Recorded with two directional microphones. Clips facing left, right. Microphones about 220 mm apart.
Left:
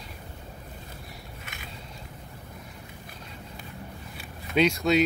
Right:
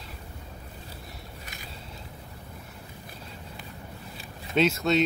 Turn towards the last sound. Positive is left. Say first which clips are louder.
# left 1 dB
turn(degrees=0)  # may be behind; listen again after turning